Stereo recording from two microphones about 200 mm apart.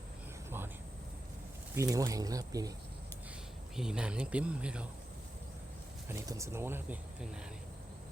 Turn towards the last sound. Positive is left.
turn(degrees=-5)  # may be behind; listen again after turning